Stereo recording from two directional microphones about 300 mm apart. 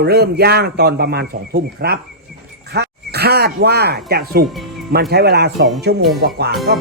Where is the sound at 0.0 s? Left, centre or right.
Right.